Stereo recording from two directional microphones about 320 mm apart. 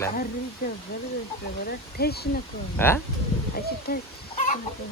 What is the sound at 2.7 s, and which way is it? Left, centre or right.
Chicken, centre.